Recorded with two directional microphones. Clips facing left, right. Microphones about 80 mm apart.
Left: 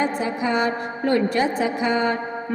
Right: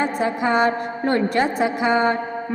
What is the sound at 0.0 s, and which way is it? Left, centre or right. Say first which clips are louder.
A woman's voice: right 2 dB; right.